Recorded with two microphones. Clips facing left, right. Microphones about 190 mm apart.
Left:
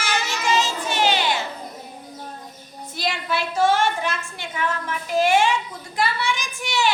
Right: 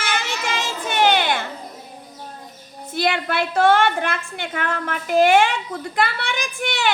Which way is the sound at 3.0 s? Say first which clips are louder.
Right 4 dB; 60° right (ahead or behind).